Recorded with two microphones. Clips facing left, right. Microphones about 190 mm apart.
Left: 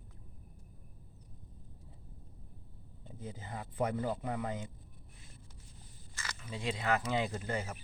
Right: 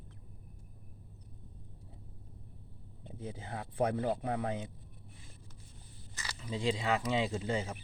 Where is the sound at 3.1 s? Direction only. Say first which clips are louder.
Right 2 dB; 20° right (ahead or behind).